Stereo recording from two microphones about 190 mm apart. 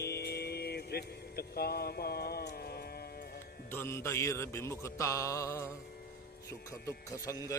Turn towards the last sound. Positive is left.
turn(degrees=15)  # may be behind; listen again after turning